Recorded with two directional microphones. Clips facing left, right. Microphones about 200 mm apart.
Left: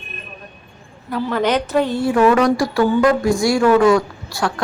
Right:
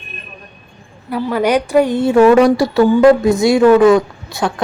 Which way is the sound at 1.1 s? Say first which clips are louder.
Right 3 dB; 10° right (ahead or behind).